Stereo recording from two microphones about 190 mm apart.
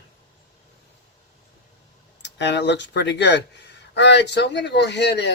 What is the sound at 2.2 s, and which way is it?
Speech, 65° left (ahead or behind).